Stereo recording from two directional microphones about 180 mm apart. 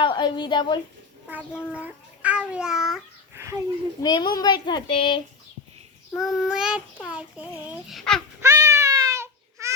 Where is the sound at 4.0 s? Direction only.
25° left (ahead or behind).